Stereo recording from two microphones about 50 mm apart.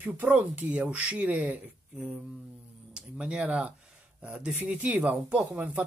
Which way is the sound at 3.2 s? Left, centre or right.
Right.